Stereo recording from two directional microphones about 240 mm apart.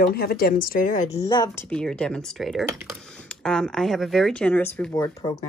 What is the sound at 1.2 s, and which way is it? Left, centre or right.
Speech, centre.